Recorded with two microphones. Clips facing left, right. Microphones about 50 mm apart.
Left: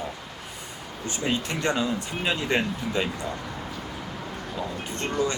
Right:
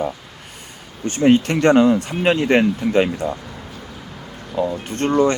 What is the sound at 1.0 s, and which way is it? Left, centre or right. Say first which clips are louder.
Speech: right 13 dB; right.